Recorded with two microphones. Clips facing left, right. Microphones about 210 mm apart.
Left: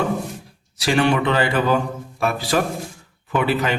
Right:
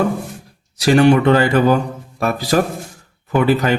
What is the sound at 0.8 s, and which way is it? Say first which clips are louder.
Speech: right 7 dB; 45° right (ahead or behind).